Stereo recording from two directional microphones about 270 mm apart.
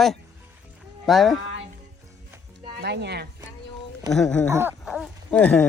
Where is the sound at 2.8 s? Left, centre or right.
Right.